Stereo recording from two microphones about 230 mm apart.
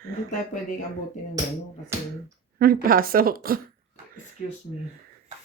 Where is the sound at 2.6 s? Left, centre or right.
Right.